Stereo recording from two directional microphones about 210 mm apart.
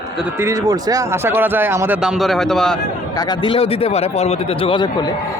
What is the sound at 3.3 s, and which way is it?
A man's voice, 25° left (ahead or behind).